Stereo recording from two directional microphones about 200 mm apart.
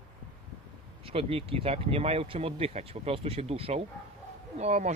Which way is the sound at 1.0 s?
30° right (ahead or behind).